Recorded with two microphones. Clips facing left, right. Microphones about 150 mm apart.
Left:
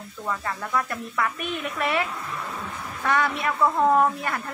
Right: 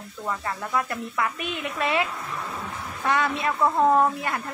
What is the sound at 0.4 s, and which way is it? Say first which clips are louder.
Speech: right 1 dB; 20° right (ahead or behind).